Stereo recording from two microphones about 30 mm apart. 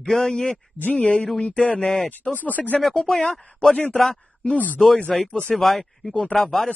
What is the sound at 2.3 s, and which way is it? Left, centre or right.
Speech, left.